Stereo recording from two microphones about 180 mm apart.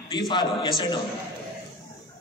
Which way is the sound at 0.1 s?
25° left (ahead or behind).